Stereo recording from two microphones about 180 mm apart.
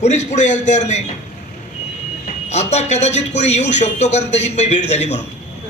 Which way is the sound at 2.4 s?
40° left (ahead or behind).